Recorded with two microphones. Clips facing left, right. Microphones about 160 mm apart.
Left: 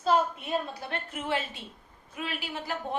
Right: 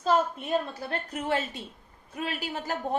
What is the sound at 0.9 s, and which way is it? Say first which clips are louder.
A woman's voice: right 3 dB; 40° right (ahead or behind).